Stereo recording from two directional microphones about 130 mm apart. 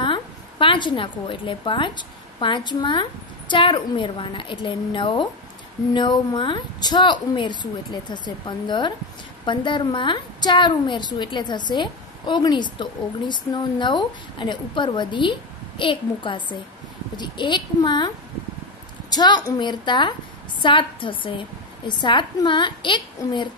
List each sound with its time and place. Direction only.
0.0 s a woman's voice: 40° left (ahead or behind)